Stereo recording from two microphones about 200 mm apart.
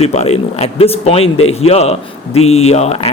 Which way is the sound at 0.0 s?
35° left (ahead or behind).